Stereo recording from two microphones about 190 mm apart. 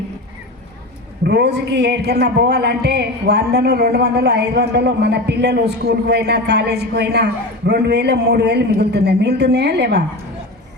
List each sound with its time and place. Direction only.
1.2 s a man's voice: 60° right (ahead or behind)